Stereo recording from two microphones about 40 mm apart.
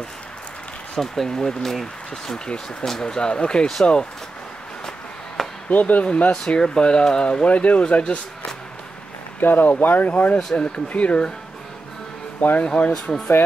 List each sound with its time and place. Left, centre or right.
0.9 s speech: centre
5.7 s speech: left
6.3 s speech: centre
7.4 s speech: left
9.4 s speech: left
12.5 s speech: left